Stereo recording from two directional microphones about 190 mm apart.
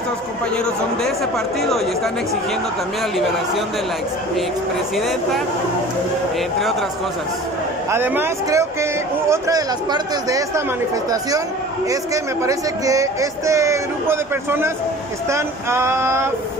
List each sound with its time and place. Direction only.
4.9 s speech: centre (ahead or behind)
7.9 s speech: 10° right (ahead or behind)
11.9 s speech: 15° right (ahead or behind)